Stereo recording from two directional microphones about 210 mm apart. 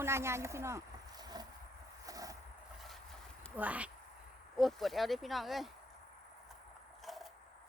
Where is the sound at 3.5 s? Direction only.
5° right (ahead or behind).